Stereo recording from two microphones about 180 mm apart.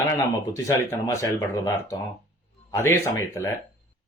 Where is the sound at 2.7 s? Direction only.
15° left (ahead or behind).